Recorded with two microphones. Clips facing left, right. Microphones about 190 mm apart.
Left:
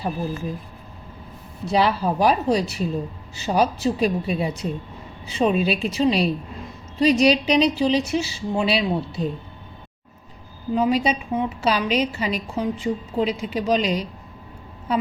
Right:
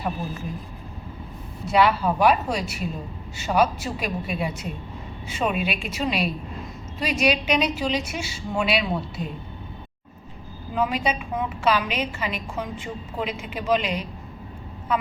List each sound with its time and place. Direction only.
1.7 s a woman's voice: 35° left (ahead or behind)
10.8 s a woman's voice: 35° left (ahead or behind)